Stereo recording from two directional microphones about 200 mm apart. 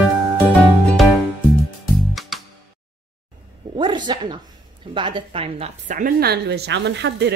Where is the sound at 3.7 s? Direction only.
25° right (ahead or behind).